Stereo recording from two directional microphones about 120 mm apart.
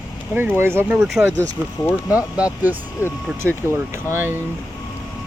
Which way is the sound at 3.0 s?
15° right (ahead or behind).